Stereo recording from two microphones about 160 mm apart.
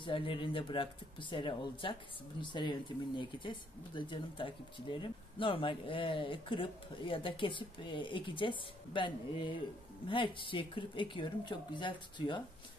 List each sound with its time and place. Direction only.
0.0 s speech: 30° left (ahead or behind)